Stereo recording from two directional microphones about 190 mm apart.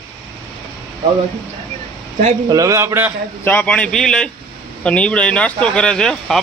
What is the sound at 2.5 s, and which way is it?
Speech, 15° right (ahead or behind).